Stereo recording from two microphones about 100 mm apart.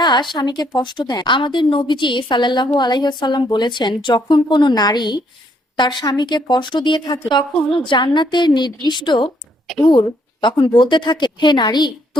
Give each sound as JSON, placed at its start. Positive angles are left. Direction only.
{"t": 0.0, "sound": "a sound", "side_deg": 50}
{"t": 0.3, "sound": "a woman's voice", "side_deg": 45}
{"t": 9.6, "sound": "speech", "side_deg": 0}
{"t": 9.9, "sound": "a woman's voice", "side_deg": 50}